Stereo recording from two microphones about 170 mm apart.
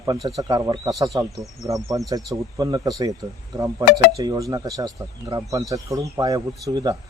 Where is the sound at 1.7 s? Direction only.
20° right (ahead or behind).